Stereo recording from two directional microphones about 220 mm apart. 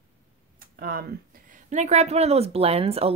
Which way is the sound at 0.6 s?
40° right (ahead or behind).